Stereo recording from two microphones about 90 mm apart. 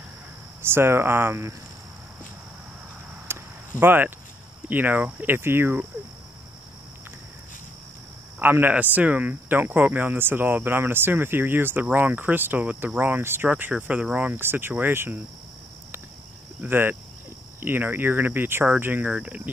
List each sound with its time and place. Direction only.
0.6 s speech: 25° right (ahead or behind)
3.3 s a sound: 25° right (ahead or behind)
3.8 s speech: 25° right (ahead or behind)
8.4 s speech: 20° right (ahead or behind)
16.6 s speech: 25° right (ahead or behind)
19.1 s cricket: 15° right (ahead or behind)